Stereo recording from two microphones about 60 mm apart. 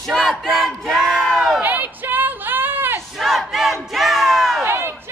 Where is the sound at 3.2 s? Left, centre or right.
Centre.